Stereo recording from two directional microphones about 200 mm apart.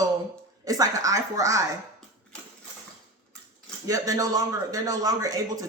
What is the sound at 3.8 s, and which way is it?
A woman's voice, 15° right (ahead or behind).